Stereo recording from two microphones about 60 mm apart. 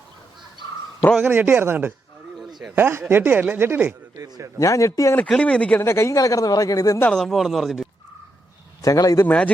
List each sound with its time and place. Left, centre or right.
1.2 s speech: right
2.4 s a sound: centre
2.7 s speech: right
4.1 s a man's voice: right
4.6 s a man's voice: left
5.3 s speech: centre
5.8 s speech: left
6.1 s speech: left
7.1 s speech: centre
8.8 s a man's voice: left